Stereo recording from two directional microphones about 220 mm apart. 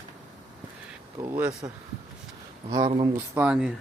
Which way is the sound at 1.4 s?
5° right (ahead or behind).